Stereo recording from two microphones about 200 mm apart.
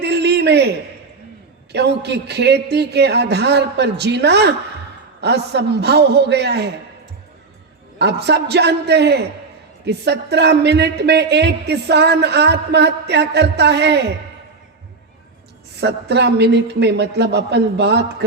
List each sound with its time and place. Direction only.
0.0 s a sound: 55° right (ahead or behind)
1.7 s speech: 55° right (ahead or behind)
7.9 s speech: 55° right (ahead or behind)
15.8 s speech: 55° right (ahead or behind)